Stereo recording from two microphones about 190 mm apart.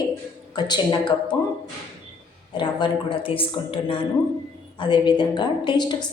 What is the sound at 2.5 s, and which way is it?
Speech, 25° left (ahead or behind).